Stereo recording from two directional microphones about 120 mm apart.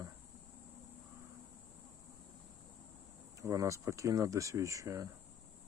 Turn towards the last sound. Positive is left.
turn(degrees=-30)  # may be behind; listen again after turning